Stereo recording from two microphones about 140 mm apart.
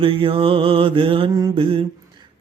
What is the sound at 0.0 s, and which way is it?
Mantra, 40° right (ahead or behind).